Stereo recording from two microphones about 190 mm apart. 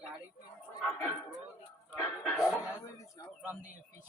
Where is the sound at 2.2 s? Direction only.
Centre (ahead or behind).